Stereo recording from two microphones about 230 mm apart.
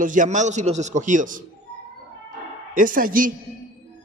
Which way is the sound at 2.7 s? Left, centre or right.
Right.